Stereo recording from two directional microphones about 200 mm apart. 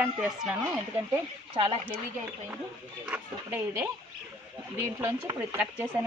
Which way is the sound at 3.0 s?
10° right (ahead or behind).